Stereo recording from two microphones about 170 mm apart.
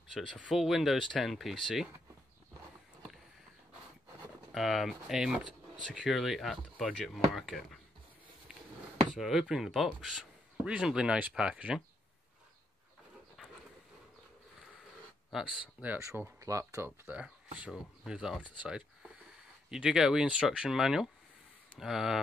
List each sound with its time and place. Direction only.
0.1 s a man's voice: 5° left (ahead or behind)
4.5 s a man's voice: centre (ahead or behind)
9.1 s a man's voice: centre (ahead or behind)
15.3 s a man's voice: centre (ahead or behind)
15.8 s a man's voice: 15° right (ahead or behind)